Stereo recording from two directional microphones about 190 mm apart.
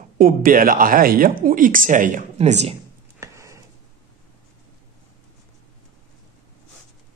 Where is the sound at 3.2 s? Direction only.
15° right (ahead or behind).